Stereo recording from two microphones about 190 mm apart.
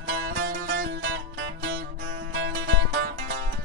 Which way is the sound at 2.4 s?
90° right.